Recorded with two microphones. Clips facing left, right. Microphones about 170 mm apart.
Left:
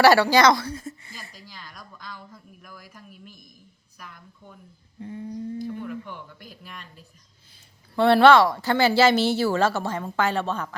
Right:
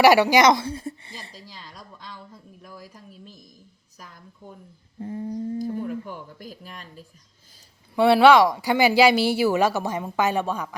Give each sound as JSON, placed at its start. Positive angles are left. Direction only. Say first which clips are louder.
{"t": 0.0, "sound": "a woman's voice", "louder": "right 1 dB", "side_deg": -15}
{"t": 7.9, "sound": "speech", "louder": "right 1 dB", "side_deg": -10}